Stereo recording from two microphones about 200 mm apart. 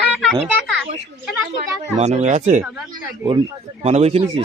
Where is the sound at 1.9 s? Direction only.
35° right (ahead or behind).